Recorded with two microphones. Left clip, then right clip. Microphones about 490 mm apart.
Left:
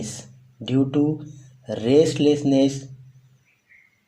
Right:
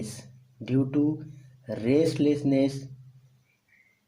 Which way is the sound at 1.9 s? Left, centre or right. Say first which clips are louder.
Left 7 dB; right.